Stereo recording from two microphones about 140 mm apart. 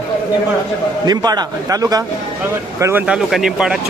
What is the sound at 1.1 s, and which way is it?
A man's voice, 30° right (ahead or behind).